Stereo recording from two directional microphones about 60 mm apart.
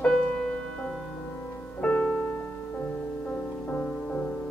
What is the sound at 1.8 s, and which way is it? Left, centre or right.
Music, left.